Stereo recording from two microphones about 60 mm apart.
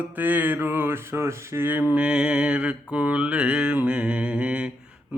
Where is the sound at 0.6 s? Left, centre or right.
Right.